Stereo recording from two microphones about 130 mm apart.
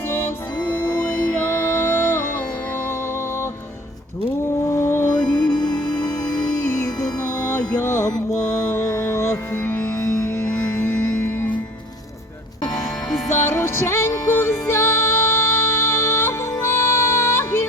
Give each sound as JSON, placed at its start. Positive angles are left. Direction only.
{"t": 1.3, "sound": "music", "side_deg": 15}
{"t": 4.6, "sound": "mantra", "side_deg": 20}
{"t": 5.3, "sound": "music", "side_deg": 35}
{"t": 6.7, "sound": "music", "side_deg": 20}
{"t": 13.2, "sound": "music", "side_deg": 20}